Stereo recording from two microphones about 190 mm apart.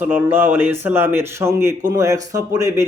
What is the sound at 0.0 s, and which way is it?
Speech, 10° right (ahead or behind).